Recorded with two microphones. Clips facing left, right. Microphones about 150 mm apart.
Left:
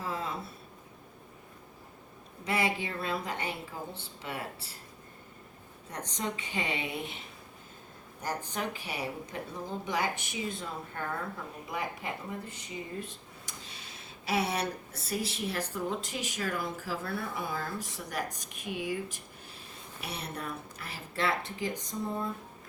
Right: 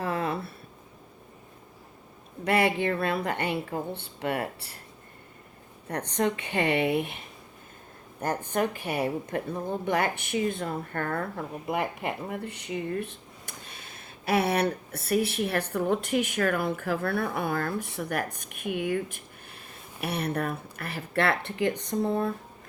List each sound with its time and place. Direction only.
0.0 s a sound: 65° right (ahead or behind)
2.4 s speech: 60° right (ahead or behind)
5.9 s speech: 60° right (ahead or behind)
8.2 s speech: 55° right (ahead or behind)